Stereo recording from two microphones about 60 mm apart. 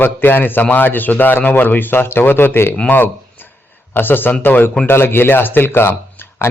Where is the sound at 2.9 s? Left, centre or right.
Left.